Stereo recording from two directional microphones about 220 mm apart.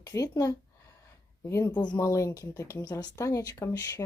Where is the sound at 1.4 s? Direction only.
15° left (ahead or behind).